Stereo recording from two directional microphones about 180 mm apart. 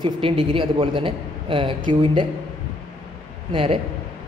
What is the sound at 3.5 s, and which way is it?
Speech, 30° right (ahead or behind).